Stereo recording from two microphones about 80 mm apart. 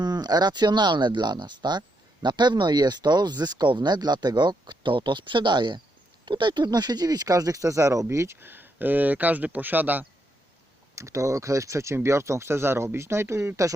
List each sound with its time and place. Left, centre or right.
0.0 s speech: right
10.9 s speech: right